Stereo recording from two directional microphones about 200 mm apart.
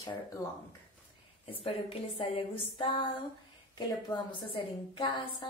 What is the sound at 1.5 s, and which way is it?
A woman's voice, 30° left (ahead or behind).